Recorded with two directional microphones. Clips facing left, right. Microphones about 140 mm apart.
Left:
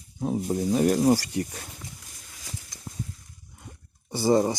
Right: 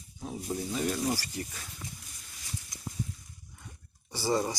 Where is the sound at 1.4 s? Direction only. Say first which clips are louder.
Left 9 dB; 45° left (ahead or behind).